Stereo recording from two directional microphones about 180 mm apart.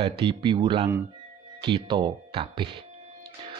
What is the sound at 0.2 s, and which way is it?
Speech, 25° right (ahead or behind).